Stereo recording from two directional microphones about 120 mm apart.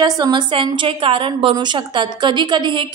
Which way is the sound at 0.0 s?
40° right (ahead or behind).